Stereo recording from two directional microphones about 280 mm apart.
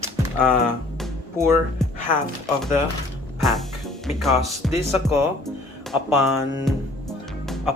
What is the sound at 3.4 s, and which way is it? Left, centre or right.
Music, centre.